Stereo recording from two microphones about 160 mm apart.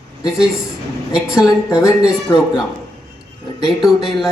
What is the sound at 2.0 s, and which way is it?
A man's voice, 5° right (ahead or behind).